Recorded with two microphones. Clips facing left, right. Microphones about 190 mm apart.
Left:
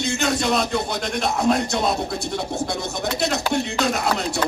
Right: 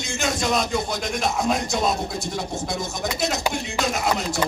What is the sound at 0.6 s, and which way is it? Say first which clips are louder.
Speech: left 1 dB; 65° left (ahead or behind).